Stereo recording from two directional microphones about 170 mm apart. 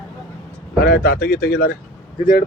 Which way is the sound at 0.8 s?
65° left (ahead or behind).